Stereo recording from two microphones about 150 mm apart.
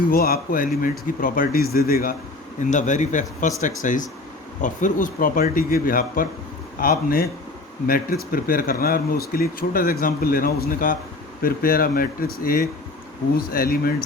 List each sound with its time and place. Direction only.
0.1 s speech: 80° left
2.6 s speech: 55° left (ahead or behind); by 13.9 s 75° left (ahead or behind)